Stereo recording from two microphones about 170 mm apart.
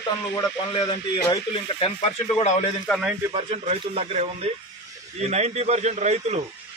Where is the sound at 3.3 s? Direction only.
30° right (ahead or behind).